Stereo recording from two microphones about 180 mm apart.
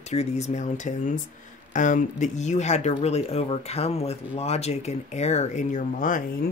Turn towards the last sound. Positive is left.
turn(degrees=45)  # may be behind; listen again after turning